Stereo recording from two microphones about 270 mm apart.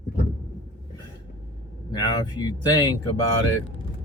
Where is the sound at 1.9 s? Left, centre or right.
Centre.